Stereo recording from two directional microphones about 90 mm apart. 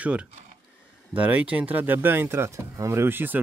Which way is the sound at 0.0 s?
15° right (ahead or behind).